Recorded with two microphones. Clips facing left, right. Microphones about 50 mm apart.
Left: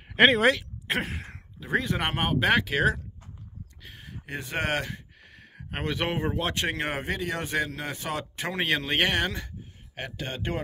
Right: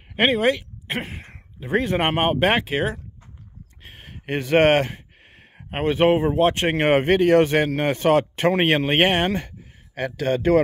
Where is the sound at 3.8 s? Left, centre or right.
Right.